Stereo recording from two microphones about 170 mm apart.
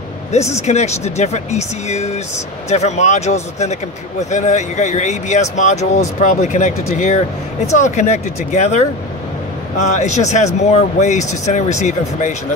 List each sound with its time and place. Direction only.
0.3 s speech: 40° left (ahead or behind)